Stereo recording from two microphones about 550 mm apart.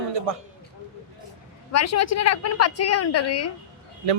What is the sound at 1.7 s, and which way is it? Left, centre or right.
A woman's voice, left.